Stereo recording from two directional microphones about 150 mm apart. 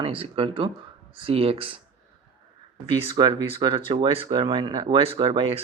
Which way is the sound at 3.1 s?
30° right (ahead or behind).